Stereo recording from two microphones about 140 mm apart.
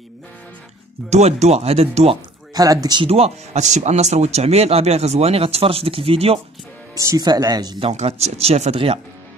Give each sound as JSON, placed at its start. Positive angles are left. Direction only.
{"t": 1.1, "sound": "speech", "side_deg": -50}
{"t": 2.5, "sound": "speech", "side_deg": -25}
{"t": 3.1, "sound": "speech", "side_deg": -45}
{"t": 7.0, "sound": "speech", "side_deg": -25}
{"t": 7.9, "sound": "speech", "side_deg": -50}